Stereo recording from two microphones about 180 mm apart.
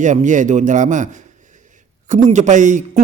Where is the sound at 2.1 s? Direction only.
40° right (ahead or behind).